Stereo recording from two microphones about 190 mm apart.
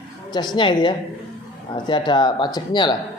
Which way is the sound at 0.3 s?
25° left (ahead or behind).